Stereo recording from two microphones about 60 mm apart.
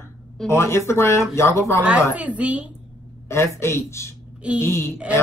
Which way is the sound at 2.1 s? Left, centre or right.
Right.